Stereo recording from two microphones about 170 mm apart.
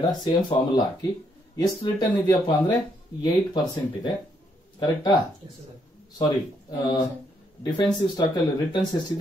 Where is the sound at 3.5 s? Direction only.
25° left (ahead or behind).